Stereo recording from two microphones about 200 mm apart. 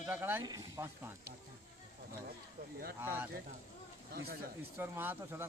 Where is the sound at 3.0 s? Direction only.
10° right (ahead or behind).